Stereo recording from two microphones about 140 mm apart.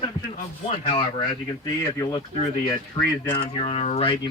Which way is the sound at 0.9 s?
40° left (ahead or behind).